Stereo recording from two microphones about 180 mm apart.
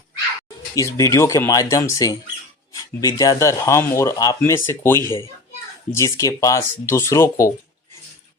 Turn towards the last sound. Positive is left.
turn(degrees=15)  # may be behind; listen again after turning